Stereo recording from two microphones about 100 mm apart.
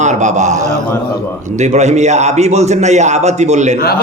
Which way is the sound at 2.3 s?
90° right.